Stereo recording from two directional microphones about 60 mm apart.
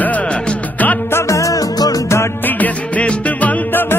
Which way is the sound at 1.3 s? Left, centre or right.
Left.